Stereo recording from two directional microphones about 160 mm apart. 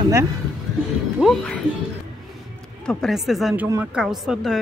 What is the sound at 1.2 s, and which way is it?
Speech, 5° left (ahead or behind).